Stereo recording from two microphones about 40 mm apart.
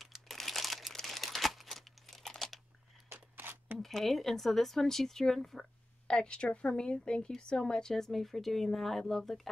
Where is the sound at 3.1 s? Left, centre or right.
Right.